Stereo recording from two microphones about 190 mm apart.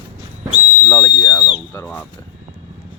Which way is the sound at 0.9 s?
15° left (ahead or behind).